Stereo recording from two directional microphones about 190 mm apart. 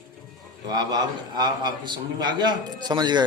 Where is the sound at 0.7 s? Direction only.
20° right (ahead or behind).